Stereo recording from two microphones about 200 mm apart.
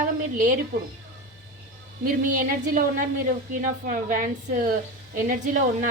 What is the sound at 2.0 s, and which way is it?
A woman's voice, 45° right (ahead or behind).